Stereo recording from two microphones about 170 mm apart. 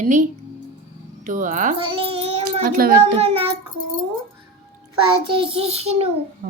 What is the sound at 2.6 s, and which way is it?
Speech, 60° right (ahead or behind).